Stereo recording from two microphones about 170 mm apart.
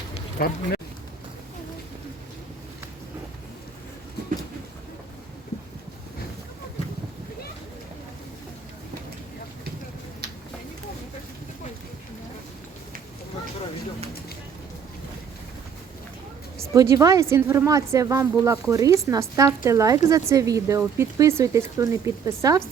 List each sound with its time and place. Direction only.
0.3 s speech: 60° left (ahead or behind)
16.7 s a woman's voice: 20° right (ahead or behind)